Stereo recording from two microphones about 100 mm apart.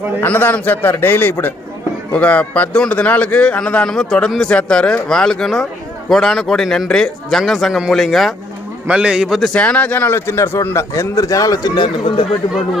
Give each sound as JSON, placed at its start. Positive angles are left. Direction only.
{"t": 0.2, "sound": "a man's voice", "side_deg": 20}
{"t": 8.9, "sound": "a man's voice", "side_deg": -10}
{"t": 9.6, "sound": "a man's voice", "side_deg": 15}